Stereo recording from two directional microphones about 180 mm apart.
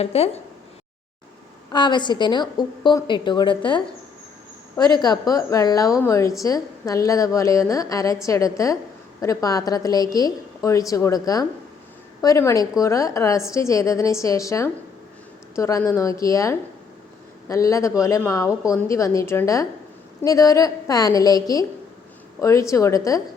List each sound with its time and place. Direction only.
0.0 s speech: 35° left (ahead or behind)
1.7 s a woman's voice: 25° left (ahead or behind)
4.9 s a woman's voice: 20° left (ahead or behind)